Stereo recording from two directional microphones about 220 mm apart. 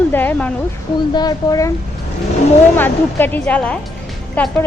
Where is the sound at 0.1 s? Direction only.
10° left (ahead or behind).